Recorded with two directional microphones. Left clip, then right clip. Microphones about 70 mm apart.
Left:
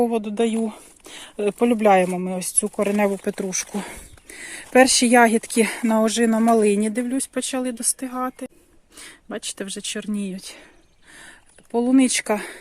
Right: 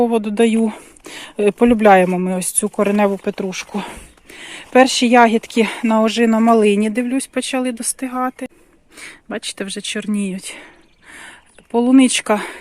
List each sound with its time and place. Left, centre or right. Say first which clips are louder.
0.2 s speech: right 7 dB; centre
0.6 s speech: right 7 dB; right
1.6 s speech: right 5 dB; centre
2.1 s speech: right 6 dB; centre
2.8 s speech: right 5 dB; left
3.2 s speech: right 4 dB; left
3.8 s a sound: right 5 dB; left
4.7 s speech: right 3 dB; left
6.0 s speech: right 4 dB; left
6.4 s speech: right 4 dB; left; by 10.3 s centre
10.3 s speech: right 7 dB; right
11.1 s a sound: right 7 dB; centre